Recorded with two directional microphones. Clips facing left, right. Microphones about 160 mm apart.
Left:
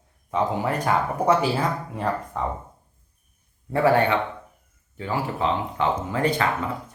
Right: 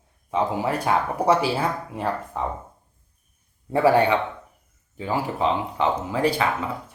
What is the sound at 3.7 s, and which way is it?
Speech, 15° right (ahead or behind).